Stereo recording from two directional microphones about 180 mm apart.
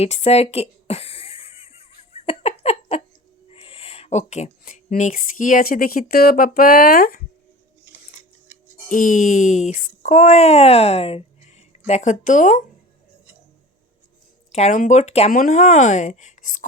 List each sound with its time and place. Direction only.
0.0 s a sound: 35° left (ahead or behind)
3.5 s speech: 30° left (ahead or behind); by 7.2 s 55° left (ahead or behind)
8.5 s music: 10° right (ahead or behind)
8.9 s a woman's voice: 45° left (ahead or behind)
14.5 s a woman's voice: 40° left (ahead or behind)